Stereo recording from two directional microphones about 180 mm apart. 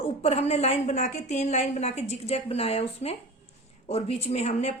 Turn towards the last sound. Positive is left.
turn(degrees=35)  # may be behind; listen again after turning